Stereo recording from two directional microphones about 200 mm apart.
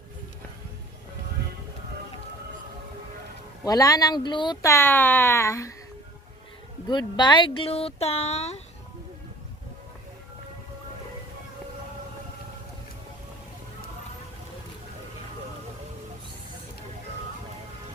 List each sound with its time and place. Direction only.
3.6 s speech: 15° left (ahead or behind)
6.8 s speech: 20° left (ahead or behind)